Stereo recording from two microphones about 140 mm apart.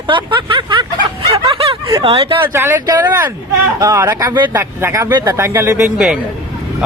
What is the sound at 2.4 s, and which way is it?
Speech, 15° right (ahead or behind).